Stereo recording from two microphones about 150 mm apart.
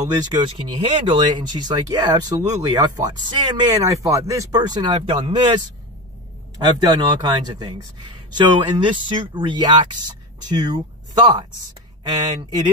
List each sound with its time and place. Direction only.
0.3 s speech: 30° right (ahead or behind)
6.8 s speech: 30° right (ahead or behind)